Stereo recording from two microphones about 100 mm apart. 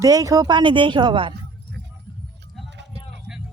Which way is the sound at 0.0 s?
35° right (ahead or behind).